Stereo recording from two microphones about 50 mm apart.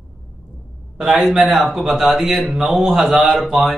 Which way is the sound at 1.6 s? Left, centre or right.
Centre.